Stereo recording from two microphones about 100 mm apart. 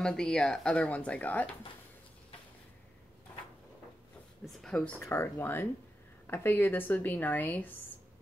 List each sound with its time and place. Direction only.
0.0 s speech: 5° left (ahead or behind)
4.5 s speech: 5° left (ahead or behind)
5.0 s speech: 25° left (ahead or behind)